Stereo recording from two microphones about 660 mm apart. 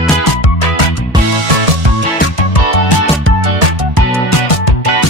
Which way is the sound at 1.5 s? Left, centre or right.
Right.